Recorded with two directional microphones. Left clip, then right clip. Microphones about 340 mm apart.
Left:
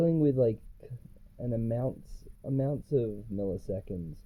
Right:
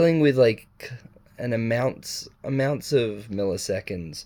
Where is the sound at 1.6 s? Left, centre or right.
Right.